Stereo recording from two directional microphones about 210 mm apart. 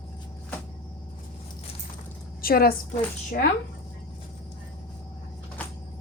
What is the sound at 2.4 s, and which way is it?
Speech, 45° left (ahead or behind).